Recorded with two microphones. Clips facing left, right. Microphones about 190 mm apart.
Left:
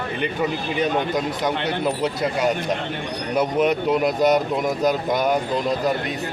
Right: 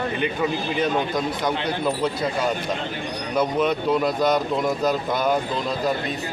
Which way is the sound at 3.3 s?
15° left (ahead or behind).